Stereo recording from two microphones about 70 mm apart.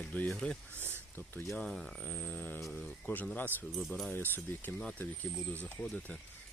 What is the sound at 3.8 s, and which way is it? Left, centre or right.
Speech, centre.